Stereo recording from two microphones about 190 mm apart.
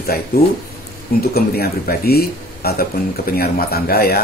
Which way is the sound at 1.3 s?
55° left (ahead or behind).